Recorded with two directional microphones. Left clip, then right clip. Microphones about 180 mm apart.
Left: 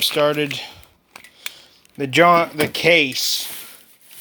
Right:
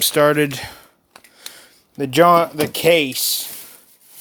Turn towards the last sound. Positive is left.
turn(degrees=-30)  # may be behind; listen again after turning